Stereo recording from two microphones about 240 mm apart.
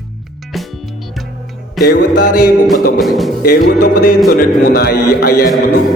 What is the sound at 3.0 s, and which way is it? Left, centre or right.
Speech, centre.